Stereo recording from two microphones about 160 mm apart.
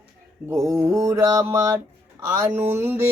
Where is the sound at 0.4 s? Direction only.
20° right (ahead or behind).